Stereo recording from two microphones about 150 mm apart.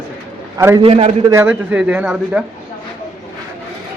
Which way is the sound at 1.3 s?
20° right (ahead or behind).